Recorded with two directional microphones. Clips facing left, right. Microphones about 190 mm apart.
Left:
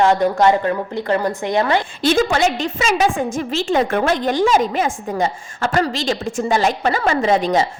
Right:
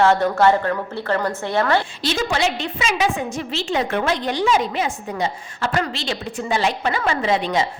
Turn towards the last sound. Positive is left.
turn(degrees=40)  # may be behind; listen again after turning